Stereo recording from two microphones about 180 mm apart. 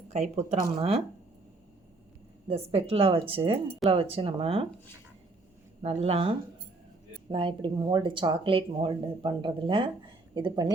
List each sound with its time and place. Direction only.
0.1 s speech: 40° right (ahead or behind)
2.5 s speech: 35° right (ahead or behind)
5.8 s speech: 35° right (ahead or behind)